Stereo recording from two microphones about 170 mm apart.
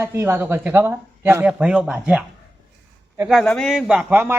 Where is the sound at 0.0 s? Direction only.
15° right (ahead or behind).